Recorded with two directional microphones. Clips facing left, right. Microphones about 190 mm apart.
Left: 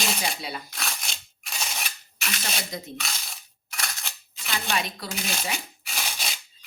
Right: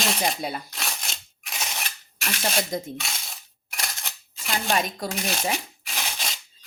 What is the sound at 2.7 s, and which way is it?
Speech, 50° right (ahead or behind).